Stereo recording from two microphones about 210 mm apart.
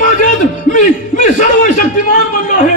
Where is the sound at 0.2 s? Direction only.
35° left (ahead or behind).